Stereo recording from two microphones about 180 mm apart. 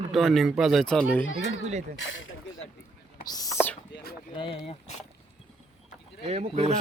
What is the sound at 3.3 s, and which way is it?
Speech, 20° left (ahead or behind).